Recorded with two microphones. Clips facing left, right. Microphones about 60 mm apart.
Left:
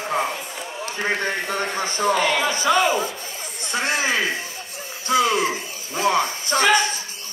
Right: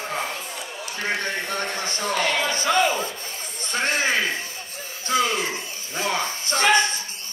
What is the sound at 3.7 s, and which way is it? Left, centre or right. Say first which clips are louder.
Speech: left 1 dB; right.